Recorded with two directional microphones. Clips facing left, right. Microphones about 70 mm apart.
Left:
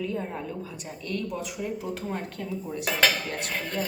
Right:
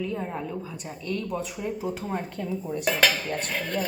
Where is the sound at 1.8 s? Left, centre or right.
Centre.